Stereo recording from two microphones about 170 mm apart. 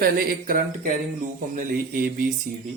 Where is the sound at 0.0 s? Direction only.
60° right (ahead or behind).